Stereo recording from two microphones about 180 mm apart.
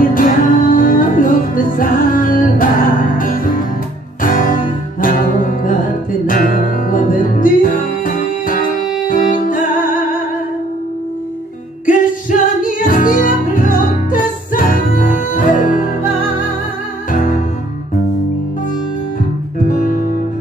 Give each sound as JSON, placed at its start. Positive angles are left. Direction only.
{"t": 0.1, "sound": "music", "side_deg": 50}
{"t": 12.3, "sound": "music", "side_deg": 50}
{"t": 17.1, "sound": "music", "side_deg": 50}
{"t": 19.6, "sound": "music", "side_deg": 45}